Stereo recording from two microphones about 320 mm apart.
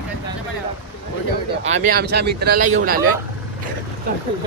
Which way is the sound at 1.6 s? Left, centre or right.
Right.